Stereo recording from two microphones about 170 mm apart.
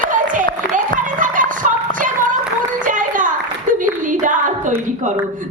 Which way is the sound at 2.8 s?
50° right (ahead or behind).